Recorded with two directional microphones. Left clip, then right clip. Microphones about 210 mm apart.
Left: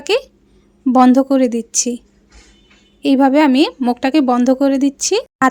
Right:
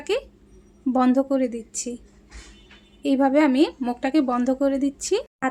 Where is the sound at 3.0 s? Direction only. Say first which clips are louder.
Left 7 dB; 40° left (ahead or behind).